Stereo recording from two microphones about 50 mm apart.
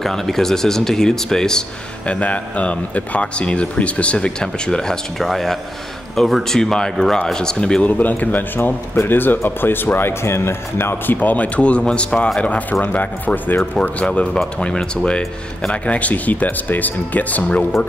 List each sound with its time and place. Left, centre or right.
0.0 s speech: centre
2.0 s a man's voice: left
5.2 s speech: centre
7.8 s speech: left
8.6 s speech: left
11.1 s a man's voice: left; by 15.0 s centre
15.7 s speech: left